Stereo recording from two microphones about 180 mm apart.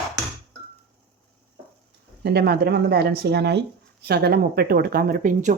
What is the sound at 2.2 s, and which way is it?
Speech, 65° right (ahead or behind).